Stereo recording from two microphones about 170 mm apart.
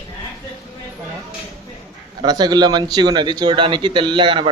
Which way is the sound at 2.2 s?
25° right (ahead or behind).